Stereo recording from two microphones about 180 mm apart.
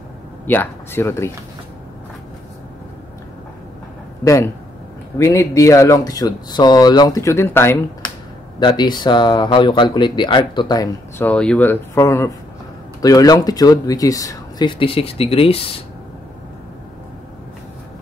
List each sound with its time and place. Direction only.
0.5 s speech: 10° left (ahead or behind)
4.2 s speech: 15° left (ahead or behind)
8.5 s speech: 25° left (ahead or behind)
11.2 s speech: 5° left (ahead or behind); by 15.8 s 30° left (ahead or behind)